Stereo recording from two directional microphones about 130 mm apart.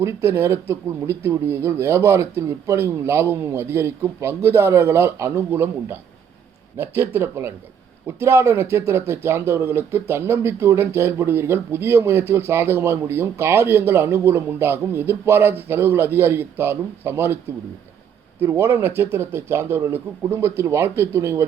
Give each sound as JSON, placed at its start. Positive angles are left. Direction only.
{"t": 0.0, "sound": "speech", "side_deg": -20}
{"t": 18.3, "sound": "speech", "side_deg": -20}